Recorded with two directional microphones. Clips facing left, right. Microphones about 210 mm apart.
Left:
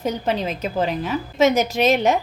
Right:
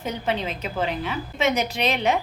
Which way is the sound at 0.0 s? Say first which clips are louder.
Left 4 dB; 40° left (ahead or behind).